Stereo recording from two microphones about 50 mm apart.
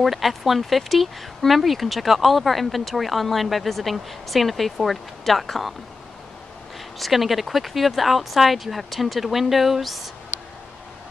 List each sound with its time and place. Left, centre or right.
0.0 s speech: centre
7.0 s speech: centre